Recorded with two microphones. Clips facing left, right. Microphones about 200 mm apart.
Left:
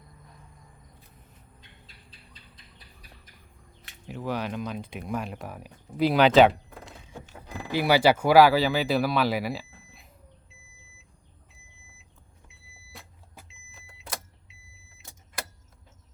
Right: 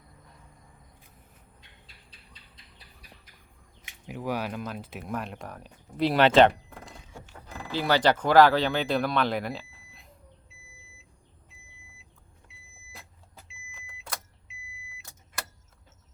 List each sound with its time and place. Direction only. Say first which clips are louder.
3.8 s speech: even; 10° right (ahead or behind)